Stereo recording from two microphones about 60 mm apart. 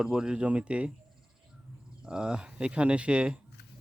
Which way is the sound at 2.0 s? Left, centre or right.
Centre.